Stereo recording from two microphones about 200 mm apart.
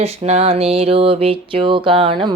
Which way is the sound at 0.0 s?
30° right (ahead or behind).